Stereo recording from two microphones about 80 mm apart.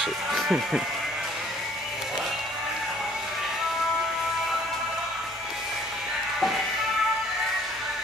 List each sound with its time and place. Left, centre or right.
0.0 s speech: centre